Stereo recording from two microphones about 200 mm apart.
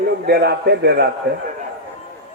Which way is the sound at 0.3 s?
55° right (ahead or behind).